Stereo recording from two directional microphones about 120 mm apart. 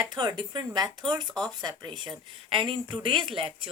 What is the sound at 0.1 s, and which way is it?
Speech, 35° right (ahead or behind).